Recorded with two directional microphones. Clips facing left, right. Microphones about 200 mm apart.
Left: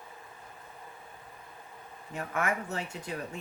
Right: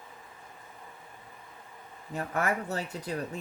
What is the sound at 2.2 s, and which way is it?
Speech, 35° right (ahead or behind).